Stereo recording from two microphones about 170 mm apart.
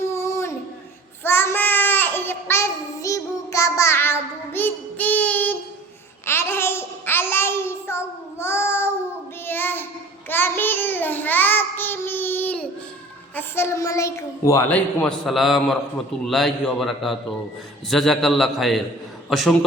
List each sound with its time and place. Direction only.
0.0 s a sound: 15° left (ahead or behind)
1.2 s child singing: 15° left (ahead or behind)
6.2 s babbling: 15° left (ahead or behind)
9.5 s child singing: 10° left (ahead or behind)
13.3 s a child's voice: 15° left (ahead or behind)
15.0 s a man's voice: 5° left (ahead or behind)